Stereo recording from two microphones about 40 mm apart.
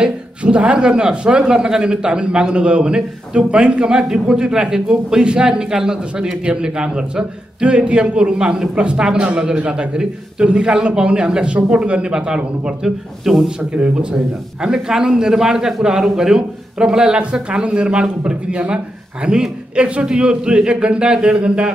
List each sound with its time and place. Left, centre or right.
0.4 s a man's voice: right
13.2 s a man's voice: centre
13.6 s speech: right
14.1 s a man's voice: centre